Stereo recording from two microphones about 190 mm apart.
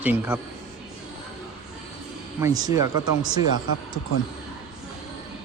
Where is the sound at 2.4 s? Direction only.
15° right (ahead or behind).